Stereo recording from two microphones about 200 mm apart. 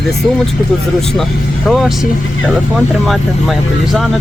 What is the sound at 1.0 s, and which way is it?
Speech, centre (ahead or behind).